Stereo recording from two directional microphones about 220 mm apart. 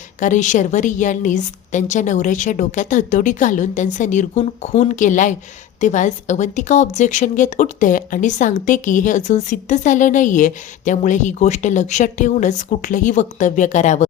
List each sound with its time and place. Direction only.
0.2 s a woman's voice: 35° left (ahead or behind)